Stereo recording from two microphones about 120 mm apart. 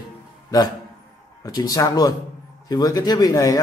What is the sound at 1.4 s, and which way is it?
A man's voice, 35° left (ahead or behind).